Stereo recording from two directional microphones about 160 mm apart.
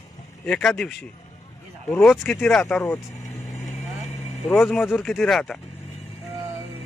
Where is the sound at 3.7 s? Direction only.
45° left (ahead or behind).